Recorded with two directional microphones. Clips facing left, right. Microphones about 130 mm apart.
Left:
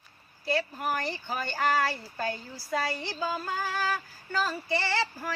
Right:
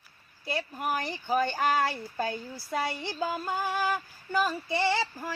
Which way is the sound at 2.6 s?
20° right (ahead or behind).